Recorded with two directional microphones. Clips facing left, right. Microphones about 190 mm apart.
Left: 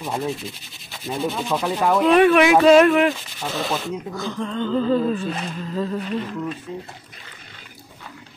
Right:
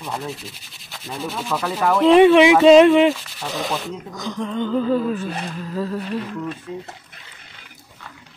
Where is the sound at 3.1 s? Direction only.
Centre (ahead or behind).